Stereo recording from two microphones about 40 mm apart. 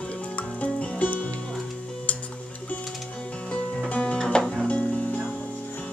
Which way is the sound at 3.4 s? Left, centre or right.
Left.